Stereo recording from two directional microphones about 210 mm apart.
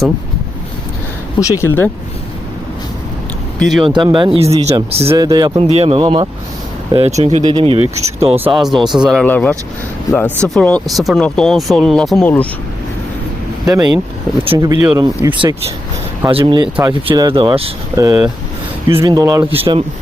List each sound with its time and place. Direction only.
1.4 s speech: 15° left (ahead or behind)
3.6 s speech: centre (ahead or behind)
3.8 s speech: 25° right (ahead or behind)
8.9 s speech: centre (ahead or behind)
13.7 s speech: 20° right (ahead or behind)
17.9 s speech: 15° right (ahead or behind)